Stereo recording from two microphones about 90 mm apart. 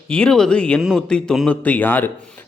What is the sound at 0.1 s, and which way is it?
Speech, 10° left (ahead or behind).